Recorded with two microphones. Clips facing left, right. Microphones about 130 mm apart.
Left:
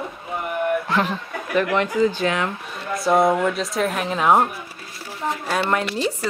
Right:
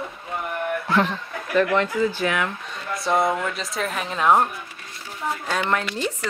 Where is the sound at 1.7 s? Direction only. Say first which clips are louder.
Left 2 dB; 20° left (ahead or behind).